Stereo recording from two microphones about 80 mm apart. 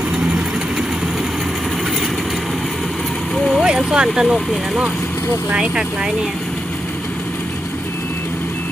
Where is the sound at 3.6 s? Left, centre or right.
Centre.